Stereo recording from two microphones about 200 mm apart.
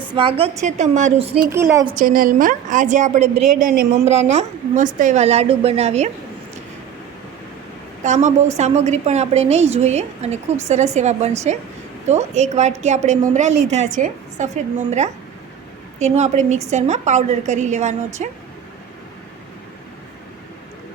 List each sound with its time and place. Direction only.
0.1 s a woman's voice: 25° right (ahead or behind)
1.5 s a woman's voice: 15° right (ahead or behind)
2.0 s a woman's voice: 45° right (ahead or behind)
8.0 s a woman's voice: 35° right (ahead or behind)